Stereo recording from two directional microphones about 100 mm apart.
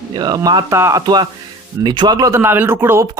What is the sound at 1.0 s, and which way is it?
Speech, 45° right (ahead or behind).